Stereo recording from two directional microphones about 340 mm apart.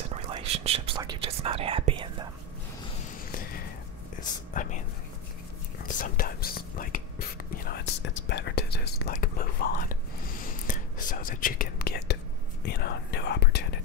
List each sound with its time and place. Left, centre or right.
0.1 s whispering: centre
4.2 s whispering: left
5.9 s whispering: left